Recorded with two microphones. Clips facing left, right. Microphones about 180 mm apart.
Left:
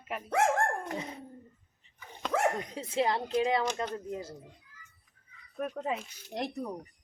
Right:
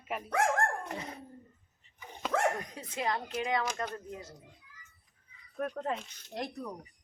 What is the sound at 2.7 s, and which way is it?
Speech, 25° left (ahead or behind).